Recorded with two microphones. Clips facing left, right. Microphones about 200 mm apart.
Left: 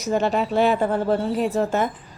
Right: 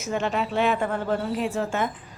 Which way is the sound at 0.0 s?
35° left (ahead or behind).